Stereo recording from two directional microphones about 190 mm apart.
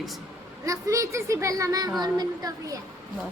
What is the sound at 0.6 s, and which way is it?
A child's voice, 15° right (ahead or behind).